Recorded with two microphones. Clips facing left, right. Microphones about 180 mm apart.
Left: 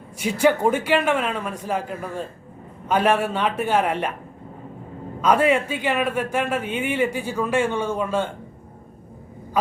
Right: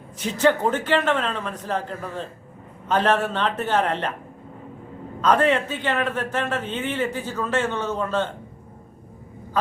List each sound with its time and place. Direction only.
0.2 s a man's voice: 10° left (ahead or behind)
5.2 s a man's voice: 10° left (ahead or behind)